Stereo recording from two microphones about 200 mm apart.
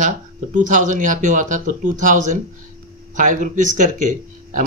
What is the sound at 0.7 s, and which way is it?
Speech, 40° right (ahead or behind).